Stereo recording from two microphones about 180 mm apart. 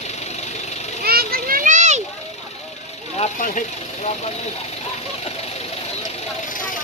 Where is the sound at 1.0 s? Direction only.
60° right (ahead or behind); by 2.0 s 40° right (ahead or behind).